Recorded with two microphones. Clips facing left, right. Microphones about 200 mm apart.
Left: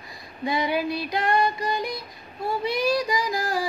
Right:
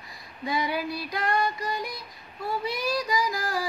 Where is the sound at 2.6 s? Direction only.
15° left (ahead or behind).